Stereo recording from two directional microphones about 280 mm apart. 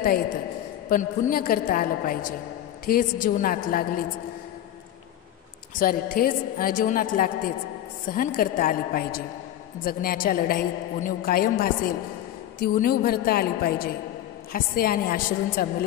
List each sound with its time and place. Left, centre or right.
0.8 s a woman's voice: left
5.8 s a woman's voice: left